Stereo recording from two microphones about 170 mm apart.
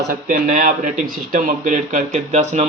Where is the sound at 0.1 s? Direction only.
50° right (ahead or behind).